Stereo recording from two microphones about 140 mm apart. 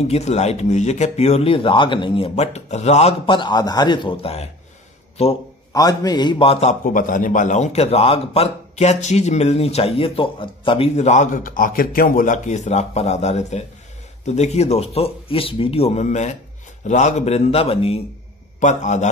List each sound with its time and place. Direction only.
0.1 s a man's voice: 50° left (ahead or behind)
3.3 s a man's voice: 30° left (ahead or behind)
5.7 s a man's voice: 25° left (ahead or behind); by 6.8 s 45° left (ahead or behind)
6.8 s a man's voice: 75° left (ahead or behind); by 10.9 s 35° left (ahead or behind)
11.0 s a man's voice: 55° left (ahead or behind)
18.6 s a man's voice: 60° left (ahead or behind)